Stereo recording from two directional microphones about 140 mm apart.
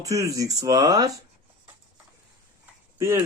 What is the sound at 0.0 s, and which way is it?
Speech, 25° right (ahead or behind).